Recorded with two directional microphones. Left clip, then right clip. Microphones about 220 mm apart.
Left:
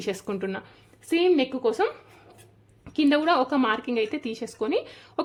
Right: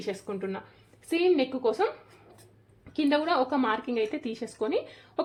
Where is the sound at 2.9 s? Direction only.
20° left (ahead or behind).